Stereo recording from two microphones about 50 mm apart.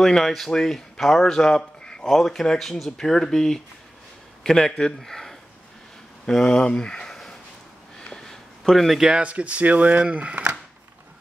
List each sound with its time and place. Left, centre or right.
0.0 s a man's voice: centre
6.2 s speech: centre
7.1 s sniff: centre
8.1 s a sound: centre
9.0 s speech: right